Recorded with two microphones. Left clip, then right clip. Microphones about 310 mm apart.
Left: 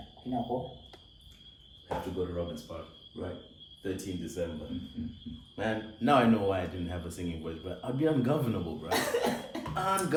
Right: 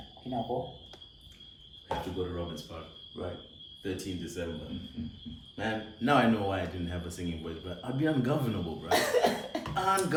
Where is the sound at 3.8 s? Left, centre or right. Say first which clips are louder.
Even; centre.